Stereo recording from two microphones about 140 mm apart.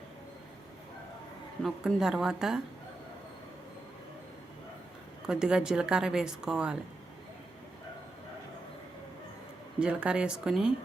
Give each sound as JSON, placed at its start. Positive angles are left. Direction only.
{"t": 1.6, "sound": "a woman's voice", "side_deg": 0}
{"t": 5.2, "sound": "a woman's voice", "side_deg": -5}
{"t": 9.8, "sound": "speech", "side_deg": -10}